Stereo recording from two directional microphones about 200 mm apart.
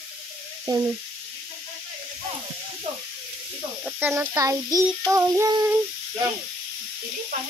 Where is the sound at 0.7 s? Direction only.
20° right (ahead or behind).